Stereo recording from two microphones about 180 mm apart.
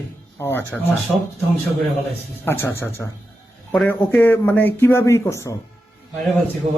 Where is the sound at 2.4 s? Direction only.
15° left (ahead or behind).